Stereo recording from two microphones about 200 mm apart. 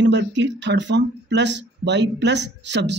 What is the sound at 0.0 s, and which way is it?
Speech, 65° right (ahead or behind).